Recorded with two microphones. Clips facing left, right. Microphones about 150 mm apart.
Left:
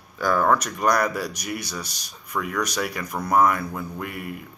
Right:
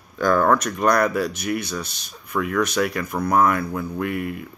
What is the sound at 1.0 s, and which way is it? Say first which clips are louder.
Speech: right 4 dB; 55° right (ahead or behind).